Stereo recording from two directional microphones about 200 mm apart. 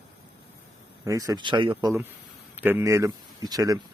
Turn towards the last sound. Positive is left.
turn(degrees=-20)  # may be behind; listen again after turning